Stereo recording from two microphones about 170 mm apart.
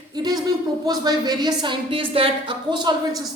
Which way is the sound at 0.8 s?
25° right (ahead or behind).